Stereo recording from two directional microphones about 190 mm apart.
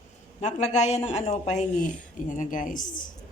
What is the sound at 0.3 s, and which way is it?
Speech, 40° left (ahead or behind).